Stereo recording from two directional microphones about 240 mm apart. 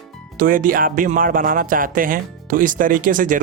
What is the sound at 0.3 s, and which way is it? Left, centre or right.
Speech, right.